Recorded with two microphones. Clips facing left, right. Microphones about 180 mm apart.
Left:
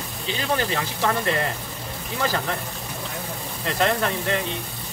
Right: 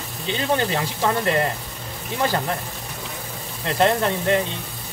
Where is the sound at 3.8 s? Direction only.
25° right (ahead or behind).